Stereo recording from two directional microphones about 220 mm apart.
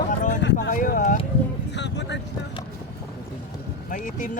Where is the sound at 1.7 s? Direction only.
50° left (ahead or behind).